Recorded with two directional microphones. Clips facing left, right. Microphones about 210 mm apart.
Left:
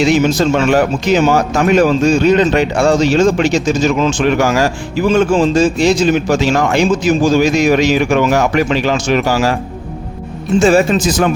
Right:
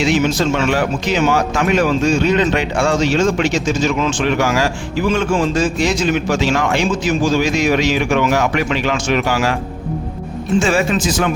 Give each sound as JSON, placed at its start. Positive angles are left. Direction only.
{"t": 0.0, "sound": "speech", "side_deg": 40}
{"t": 5.3, "sound": "speech", "side_deg": 25}
{"t": 10.6, "sound": "speech", "side_deg": 40}